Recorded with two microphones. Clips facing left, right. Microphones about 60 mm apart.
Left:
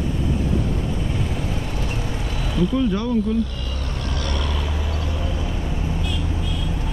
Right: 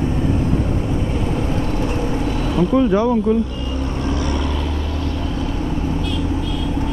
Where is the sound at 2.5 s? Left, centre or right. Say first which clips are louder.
Right 4 dB; right.